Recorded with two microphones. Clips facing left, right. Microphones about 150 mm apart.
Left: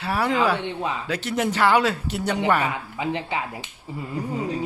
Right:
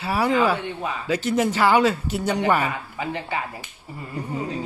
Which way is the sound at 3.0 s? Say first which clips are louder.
Left 1 dB; 20° left (ahead or behind).